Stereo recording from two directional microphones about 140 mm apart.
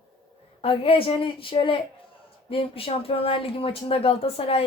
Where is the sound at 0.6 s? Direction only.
40° left (ahead or behind).